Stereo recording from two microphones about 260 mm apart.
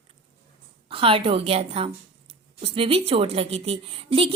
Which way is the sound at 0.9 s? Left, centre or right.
Right.